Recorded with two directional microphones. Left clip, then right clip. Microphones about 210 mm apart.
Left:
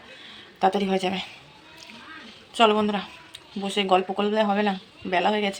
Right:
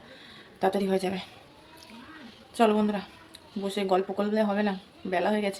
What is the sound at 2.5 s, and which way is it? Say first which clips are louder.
Speech: left 4 dB; 5° left (ahead or behind).